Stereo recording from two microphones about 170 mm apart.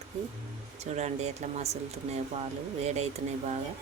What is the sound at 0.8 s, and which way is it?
Speech, 40° right (ahead or behind).